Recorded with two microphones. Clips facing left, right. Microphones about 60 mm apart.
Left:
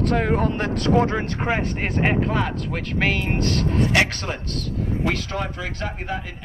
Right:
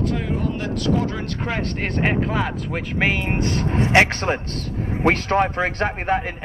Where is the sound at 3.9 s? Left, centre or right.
Right.